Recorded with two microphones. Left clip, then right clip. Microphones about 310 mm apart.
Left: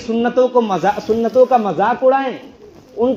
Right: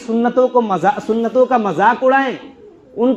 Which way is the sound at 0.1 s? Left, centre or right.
Right.